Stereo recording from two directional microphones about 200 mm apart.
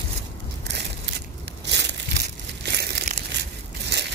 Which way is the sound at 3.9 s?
55° right (ahead or behind).